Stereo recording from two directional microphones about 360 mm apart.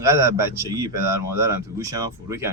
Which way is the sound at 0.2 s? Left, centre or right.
Centre.